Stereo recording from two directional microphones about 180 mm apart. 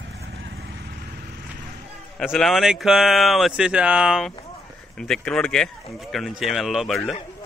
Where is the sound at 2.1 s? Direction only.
Centre (ahead or behind).